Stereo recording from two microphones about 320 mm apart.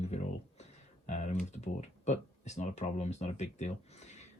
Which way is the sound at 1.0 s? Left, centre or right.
Left.